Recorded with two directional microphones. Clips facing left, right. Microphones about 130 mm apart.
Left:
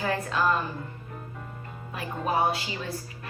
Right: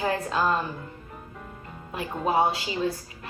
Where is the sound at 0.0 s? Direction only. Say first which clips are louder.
Right 2 dB; 30° right (ahead or behind).